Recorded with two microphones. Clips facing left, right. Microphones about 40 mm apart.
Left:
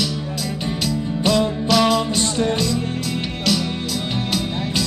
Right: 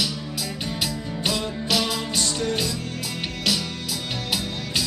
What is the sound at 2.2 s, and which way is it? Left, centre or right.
Music, left.